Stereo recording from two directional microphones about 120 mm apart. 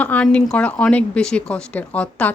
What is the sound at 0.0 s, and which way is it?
A woman's voice, 10° left (ahead or behind).